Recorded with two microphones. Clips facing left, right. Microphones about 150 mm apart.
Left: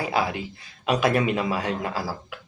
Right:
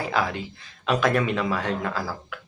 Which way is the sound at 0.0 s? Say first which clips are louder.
Left 1 dB; 10° left (ahead or behind).